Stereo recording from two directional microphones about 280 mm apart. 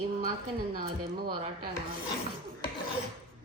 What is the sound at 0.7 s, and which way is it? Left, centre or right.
Speech, right.